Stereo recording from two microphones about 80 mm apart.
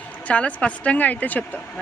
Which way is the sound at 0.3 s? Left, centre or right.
Centre.